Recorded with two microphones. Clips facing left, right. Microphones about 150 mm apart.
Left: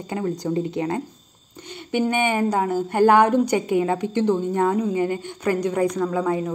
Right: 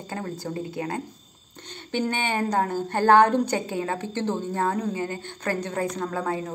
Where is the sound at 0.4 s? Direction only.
20° left (ahead or behind).